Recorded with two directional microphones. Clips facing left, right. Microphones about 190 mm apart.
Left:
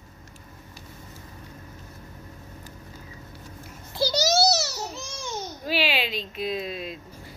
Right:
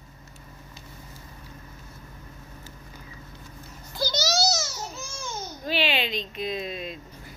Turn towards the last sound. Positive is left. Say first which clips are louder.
# left 1 dB
turn(degrees=5)  # may be behind; listen again after turning